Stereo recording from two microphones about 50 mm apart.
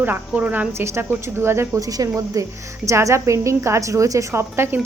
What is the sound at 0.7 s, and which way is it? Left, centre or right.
Speech, right.